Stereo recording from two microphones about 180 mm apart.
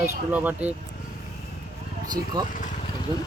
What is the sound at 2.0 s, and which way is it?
Speech, 20° right (ahead or behind).